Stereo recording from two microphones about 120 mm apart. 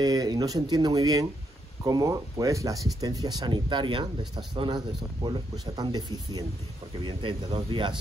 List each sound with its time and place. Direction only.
0.0 s speech: 35° right (ahead or behind)